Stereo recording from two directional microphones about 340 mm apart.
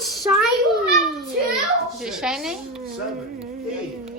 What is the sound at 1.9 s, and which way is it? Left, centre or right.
Speech, centre.